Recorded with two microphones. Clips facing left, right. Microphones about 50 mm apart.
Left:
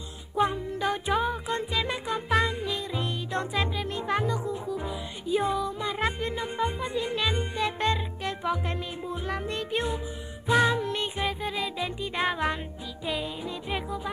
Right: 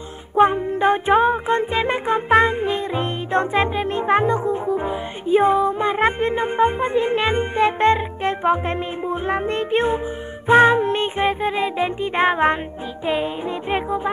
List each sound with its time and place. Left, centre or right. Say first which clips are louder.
0.4 s music: right 10 dB; right